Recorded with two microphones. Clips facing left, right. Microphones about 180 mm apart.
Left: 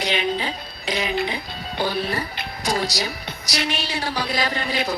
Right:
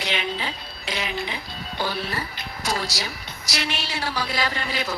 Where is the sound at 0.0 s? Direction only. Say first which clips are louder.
Left 4 dB; 15° left (ahead or behind).